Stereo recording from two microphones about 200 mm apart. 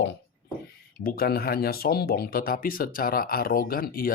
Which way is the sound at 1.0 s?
45° left (ahead or behind).